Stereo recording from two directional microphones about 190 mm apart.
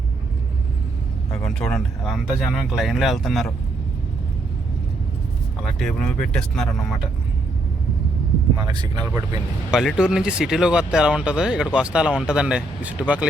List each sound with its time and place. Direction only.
1.3 s speech: 5° left (ahead or behind)
5.6 s speech: centre (ahead or behind)
8.5 s speech: 20° right (ahead or behind)
9.7 s speech: 5° right (ahead or behind)